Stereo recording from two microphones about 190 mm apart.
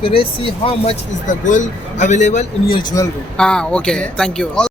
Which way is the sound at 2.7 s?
15° left (ahead or behind).